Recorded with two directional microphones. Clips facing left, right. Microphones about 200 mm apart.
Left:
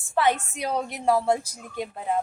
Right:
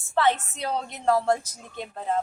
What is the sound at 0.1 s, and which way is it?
A woman's voice, 15° left (ahead or behind).